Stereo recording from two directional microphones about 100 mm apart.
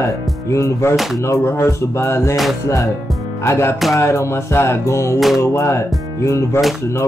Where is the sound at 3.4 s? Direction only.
25° left (ahead or behind).